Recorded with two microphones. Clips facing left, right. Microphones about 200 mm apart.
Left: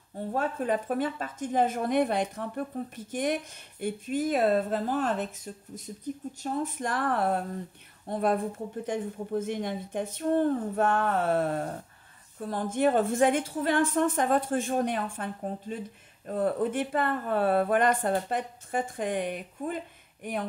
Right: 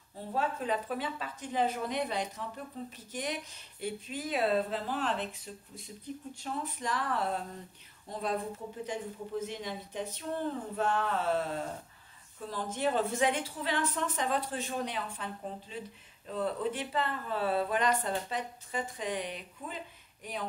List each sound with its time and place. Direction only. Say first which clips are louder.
0.3 s speech: left 4 dB; 50° left (ahead or behind)